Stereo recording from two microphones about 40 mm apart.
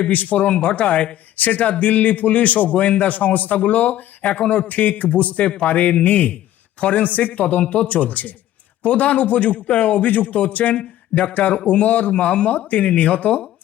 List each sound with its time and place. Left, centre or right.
0.1 s a man's voice: left